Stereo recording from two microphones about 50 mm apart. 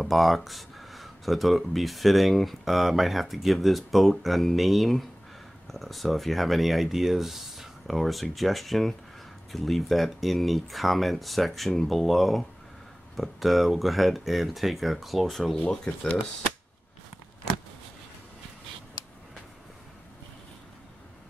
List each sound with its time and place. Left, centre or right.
0.0 s speech: centre
15.9 s speech: left